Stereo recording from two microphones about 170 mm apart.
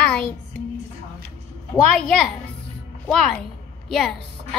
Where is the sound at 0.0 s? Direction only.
5° left (ahead or behind).